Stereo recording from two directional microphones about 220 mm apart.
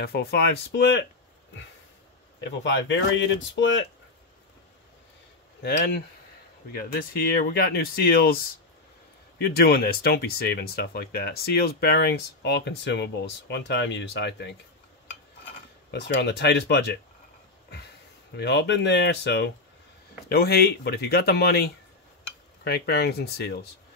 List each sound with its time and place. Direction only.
0.0 s speech: 45° left (ahead or behind)
2.6 s speech: 55° left (ahead or behind)
6.7 s speech: 40° left (ahead or behind)
15.9 s speech: 50° left (ahead or behind)
18.3 s speech: 50° left (ahead or behind)